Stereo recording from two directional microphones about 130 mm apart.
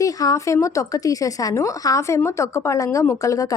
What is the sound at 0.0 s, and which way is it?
Speech, 25° left (ahead or behind).